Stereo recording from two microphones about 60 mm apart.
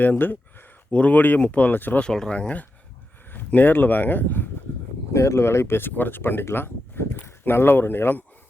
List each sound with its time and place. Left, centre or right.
0.0 s speech: left
2.0 s speech: centre
3.3 s speech: left
5.1 s speech: left